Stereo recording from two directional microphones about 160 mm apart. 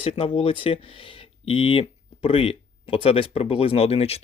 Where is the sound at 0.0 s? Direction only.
35° left (ahead or behind).